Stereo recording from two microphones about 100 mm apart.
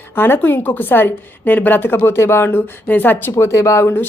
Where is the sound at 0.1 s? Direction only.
20° left (ahead or behind).